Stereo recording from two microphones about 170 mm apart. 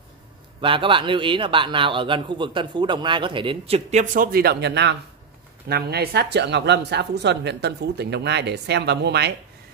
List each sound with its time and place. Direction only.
0.6 s a man's voice: 30° right (ahead or behind); by 4.9 s 90° right
5.7 s speech: 70° right (ahead or behind)